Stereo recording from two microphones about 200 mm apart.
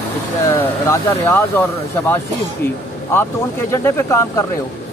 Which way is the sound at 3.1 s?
10° left (ahead or behind).